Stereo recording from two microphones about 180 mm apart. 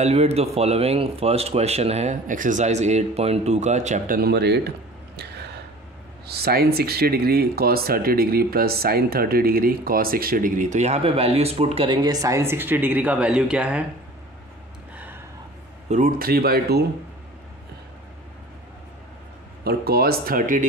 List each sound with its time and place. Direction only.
0.0 s speech: 35° right (ahead or behind)
4.2 s speech: 65° right (ahead or behind); by 13.8 s 5° right (ahead or behind)
15.9 s speech: 50° right (ahead or behind)
19.6 s speech: 60° right (ahead or behind)